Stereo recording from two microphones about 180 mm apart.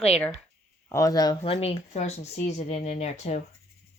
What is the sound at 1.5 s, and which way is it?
Speech, 35° left (ahead or behind).